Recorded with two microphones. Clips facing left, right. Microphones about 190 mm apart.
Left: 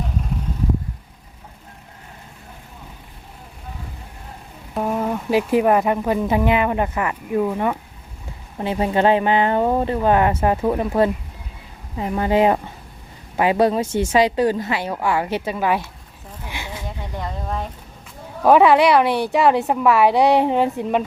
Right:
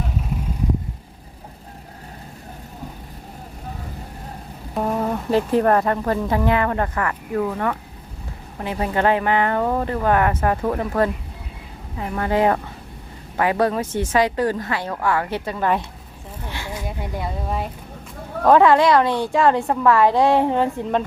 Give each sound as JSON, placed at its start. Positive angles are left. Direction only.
{"t": 4.7, "sound": "a woman's voice", "side_deg": 5}
{"t": 16.8, "sound": "speech", "side_deg": -10}
{"t": 18.4, "sound": "a woman's voice", "side_deg": 10}